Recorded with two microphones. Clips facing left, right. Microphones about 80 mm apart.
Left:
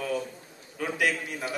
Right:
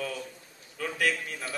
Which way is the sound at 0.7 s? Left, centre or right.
Left.